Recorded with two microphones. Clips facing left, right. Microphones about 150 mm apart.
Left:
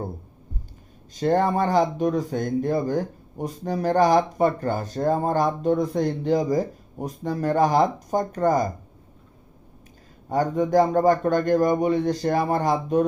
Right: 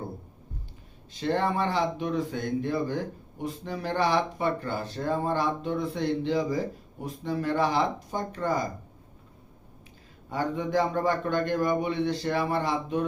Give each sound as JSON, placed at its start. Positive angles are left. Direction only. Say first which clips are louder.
{"t": 1.1, "sound": "speech", "louder": "left 6 dB", "side_deg": 45}
{"t": 10.2, "sound": "speech", "louder": "left 7 dB", "side_deg": 45}